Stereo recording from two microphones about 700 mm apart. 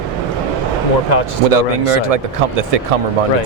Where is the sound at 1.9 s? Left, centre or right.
Right.